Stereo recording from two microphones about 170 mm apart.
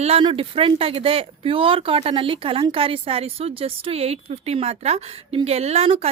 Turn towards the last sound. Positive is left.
turn(degrees=-35)  # may be behind; listen again after turning